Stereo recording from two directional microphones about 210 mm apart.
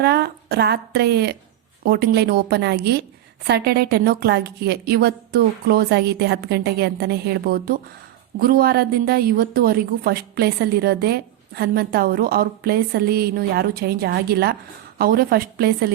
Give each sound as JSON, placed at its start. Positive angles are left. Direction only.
{"t": 0.0, "sound": "a woman's voice", "side_deg": -50}